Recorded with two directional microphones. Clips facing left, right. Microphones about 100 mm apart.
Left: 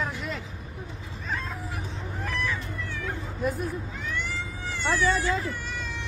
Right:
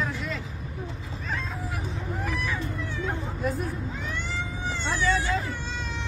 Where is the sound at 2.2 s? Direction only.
15° right (ahead or behind).